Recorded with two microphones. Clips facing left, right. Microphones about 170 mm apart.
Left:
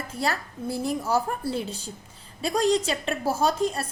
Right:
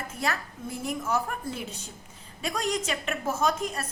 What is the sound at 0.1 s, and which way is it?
A woman's voice, 35° left (ahead or behind).